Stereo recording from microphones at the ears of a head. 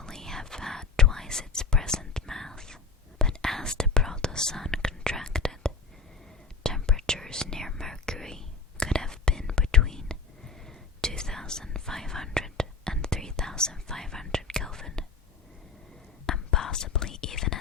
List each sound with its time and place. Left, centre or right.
0.0 s whispering: centre
16.2 s whispering: left